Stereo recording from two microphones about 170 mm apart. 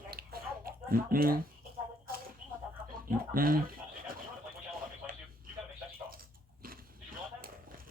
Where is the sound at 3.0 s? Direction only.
55° right (ahead or behind).